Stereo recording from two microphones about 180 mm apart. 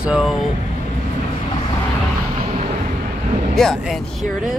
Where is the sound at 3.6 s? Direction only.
Centre (ahead or behind).